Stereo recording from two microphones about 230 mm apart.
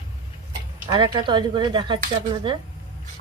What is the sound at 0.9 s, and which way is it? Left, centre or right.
Speech, centre.